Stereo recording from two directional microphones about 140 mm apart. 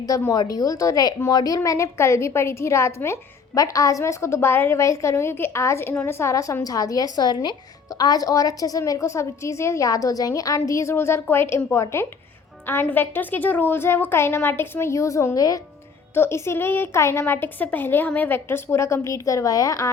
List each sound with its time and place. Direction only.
0.0 s a woman's voice: 25° left (ahead or behind)